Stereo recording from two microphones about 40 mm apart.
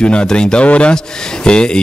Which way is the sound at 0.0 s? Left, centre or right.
Left.